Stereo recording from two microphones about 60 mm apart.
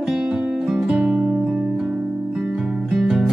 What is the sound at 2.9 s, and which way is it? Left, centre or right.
Music, centre.